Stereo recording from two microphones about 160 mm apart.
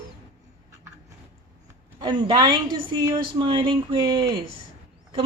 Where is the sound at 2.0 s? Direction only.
30° right (ahead or behind).